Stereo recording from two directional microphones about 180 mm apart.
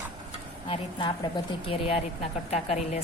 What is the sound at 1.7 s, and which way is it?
A woman's voice, 30° left (ahead or behind).